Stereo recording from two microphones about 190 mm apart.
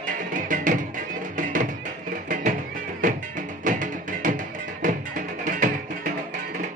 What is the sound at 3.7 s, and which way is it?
Music, 40° right (ahead or behind).